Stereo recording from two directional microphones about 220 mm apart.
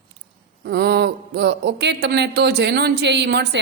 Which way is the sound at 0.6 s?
50° right (ahead or behind).